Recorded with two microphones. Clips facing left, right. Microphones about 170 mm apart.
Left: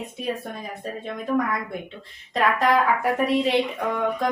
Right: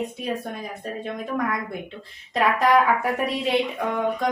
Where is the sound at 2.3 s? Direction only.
Centre (ahead or behind).